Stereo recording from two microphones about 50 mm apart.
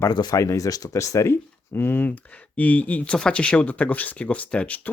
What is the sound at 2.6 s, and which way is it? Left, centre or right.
Speech, left.